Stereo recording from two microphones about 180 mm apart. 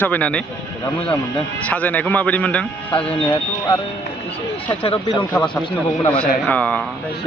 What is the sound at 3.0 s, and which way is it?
Speech, 30° left (ahead or behind).